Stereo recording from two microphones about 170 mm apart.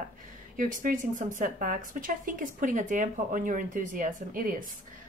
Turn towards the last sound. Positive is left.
turn(degrees=-50)  # may be behind; listen again after turning